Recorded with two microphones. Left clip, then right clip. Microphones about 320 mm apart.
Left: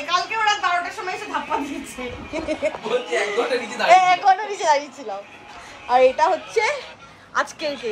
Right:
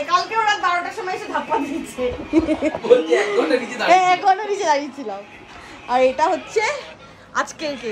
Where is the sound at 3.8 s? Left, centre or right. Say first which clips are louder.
Left 1 dB; centre.